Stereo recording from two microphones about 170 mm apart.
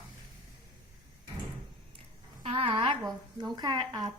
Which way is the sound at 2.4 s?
35° right (ahead or behind).